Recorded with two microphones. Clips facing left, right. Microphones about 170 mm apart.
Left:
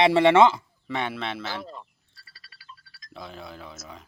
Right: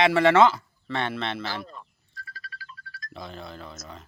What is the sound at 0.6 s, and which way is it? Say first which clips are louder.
Speech: even; 10° left (ahead or behind).